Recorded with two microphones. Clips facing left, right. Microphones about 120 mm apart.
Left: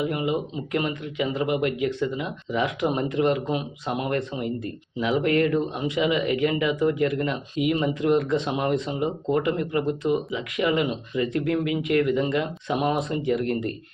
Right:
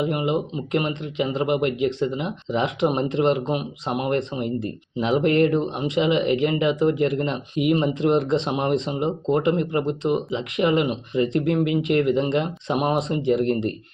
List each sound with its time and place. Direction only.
0.0 s speech: 25° right (ahead or behind)